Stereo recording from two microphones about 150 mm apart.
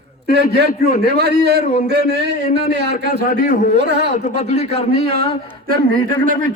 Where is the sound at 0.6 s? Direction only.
70° left (ahead or behind).